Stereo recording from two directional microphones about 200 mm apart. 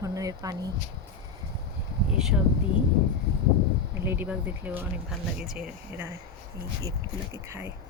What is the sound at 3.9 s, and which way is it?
Speech, 10° right (ahead or behind).